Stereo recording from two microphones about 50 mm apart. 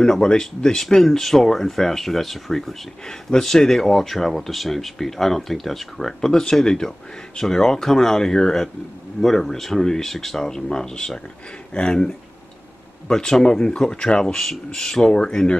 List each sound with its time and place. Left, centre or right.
0.0 s speech: centre